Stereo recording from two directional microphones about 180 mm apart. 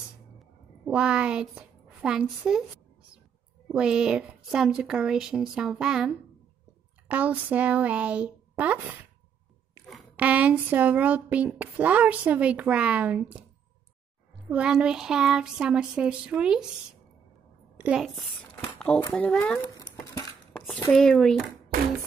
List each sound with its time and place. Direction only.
0.4 s a woman's voice: 5° right (ahead or behind)
3.6 s a woman's voice: 5° right (ahead or behind)
14.5 s a woman's voice: 5° right (ahead or behind)
17.7 s a child's voice: 5° right (ahead or behind)
19.8 s a sound: 20° left (ahead or behind)
20.5 s a sound: centre (ahead or behind)
20.9 s a woman's voice: centre (ahead or behind)